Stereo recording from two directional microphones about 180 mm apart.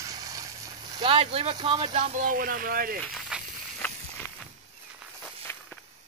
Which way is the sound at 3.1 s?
5° right (ahead or behind).